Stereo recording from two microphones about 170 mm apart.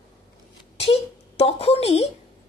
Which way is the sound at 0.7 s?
35° left (ahead or behind).